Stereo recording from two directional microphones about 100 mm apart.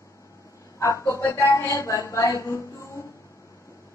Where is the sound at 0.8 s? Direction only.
30° left (ahead or behind).